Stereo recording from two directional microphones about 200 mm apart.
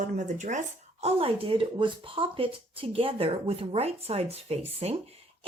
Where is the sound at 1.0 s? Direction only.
30° right (ahead or behind).